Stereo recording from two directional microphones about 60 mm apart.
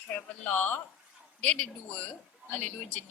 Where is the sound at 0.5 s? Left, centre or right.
Left.